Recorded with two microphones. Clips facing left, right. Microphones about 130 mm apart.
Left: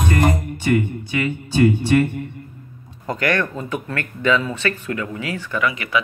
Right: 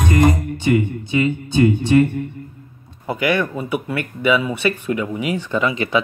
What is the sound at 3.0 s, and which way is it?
Speech, 10° right (ahead or behind).